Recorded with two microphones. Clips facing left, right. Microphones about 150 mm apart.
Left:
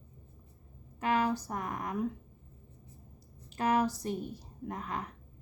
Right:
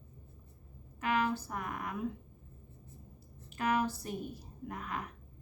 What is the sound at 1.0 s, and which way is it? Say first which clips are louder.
Speech: left 2 dB; 35° left (ahead or behind).